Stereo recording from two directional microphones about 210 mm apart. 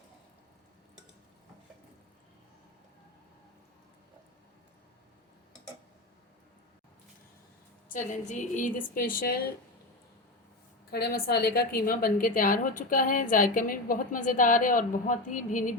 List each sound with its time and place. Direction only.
7.9 s a woman's voice: 35° left (ahead or behind)
10.9 s a woman's voice: 50° left (ahead or behind)